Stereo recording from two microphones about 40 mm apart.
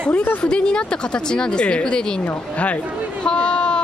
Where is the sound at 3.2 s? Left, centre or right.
Left.